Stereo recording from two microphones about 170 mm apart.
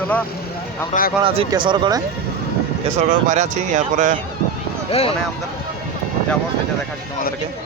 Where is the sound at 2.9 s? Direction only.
45° right (ahead or behind).